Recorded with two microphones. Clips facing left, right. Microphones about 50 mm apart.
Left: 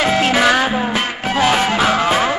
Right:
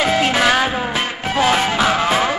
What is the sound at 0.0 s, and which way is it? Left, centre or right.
Music, centre.